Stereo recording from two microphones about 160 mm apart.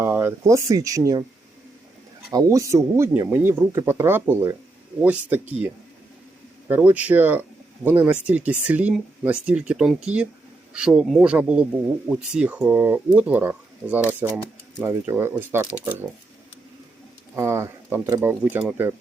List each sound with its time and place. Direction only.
0.0 s speech: 15° right (ahead or behind)
2.3 s speech: 20° right (ahead or behind)
6.7 s speech: 10° right (ahead or behind)
17.3 s speech: 15° right (ahead or behind)